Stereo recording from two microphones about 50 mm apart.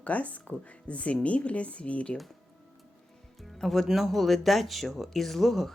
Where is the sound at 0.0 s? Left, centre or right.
Left.